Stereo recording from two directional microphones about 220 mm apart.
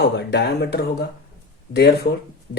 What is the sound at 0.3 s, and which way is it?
Speech, 50° left (ahead or behind).